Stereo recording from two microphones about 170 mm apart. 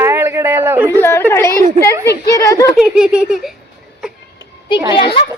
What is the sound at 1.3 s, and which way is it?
A woman's voice, 15° left (ahead or behind).